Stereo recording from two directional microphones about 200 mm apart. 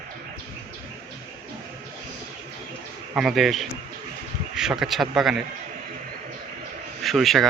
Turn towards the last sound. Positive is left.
turn(degrees=0)  # may be behind; listen again after turning